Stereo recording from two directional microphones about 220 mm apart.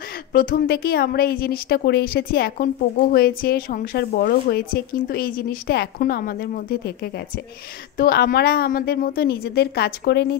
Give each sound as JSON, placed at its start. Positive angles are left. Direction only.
{"t": 0.3, "sound": "a woman's voice", "side_deg": 40}